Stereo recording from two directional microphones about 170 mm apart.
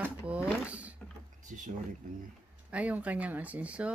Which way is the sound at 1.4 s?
45° right (ahead or behind).